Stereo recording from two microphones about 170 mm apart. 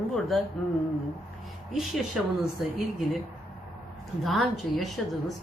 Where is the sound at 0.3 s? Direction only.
Centre (ahead or behind).